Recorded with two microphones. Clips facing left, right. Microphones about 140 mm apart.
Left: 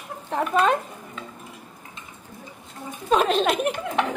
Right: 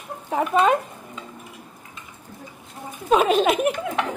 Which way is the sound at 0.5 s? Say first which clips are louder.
Right 2 dB; 5° right (ahead or behind).